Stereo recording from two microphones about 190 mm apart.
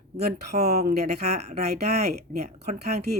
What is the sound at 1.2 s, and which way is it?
Speech, 35° right (ahead or behind).